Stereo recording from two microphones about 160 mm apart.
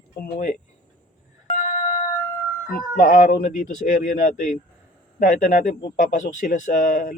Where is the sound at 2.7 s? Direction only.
60° left (ahead or behind).